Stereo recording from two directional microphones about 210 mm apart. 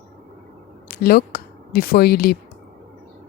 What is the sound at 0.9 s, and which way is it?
A woman's voice, 45° left (ahead or behind).